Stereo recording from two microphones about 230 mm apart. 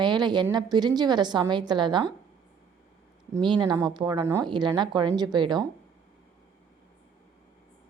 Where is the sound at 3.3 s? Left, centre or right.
Centre.